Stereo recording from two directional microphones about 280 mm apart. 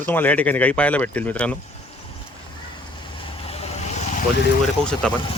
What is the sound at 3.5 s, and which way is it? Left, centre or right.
Vehicle, left.